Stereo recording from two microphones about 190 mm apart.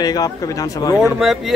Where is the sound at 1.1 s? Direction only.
Centre (ahead or behind).